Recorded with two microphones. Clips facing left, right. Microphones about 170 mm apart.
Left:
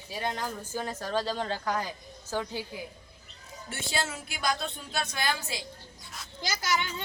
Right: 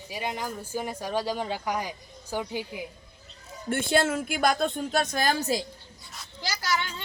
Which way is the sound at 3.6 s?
55° right (ahead or behind).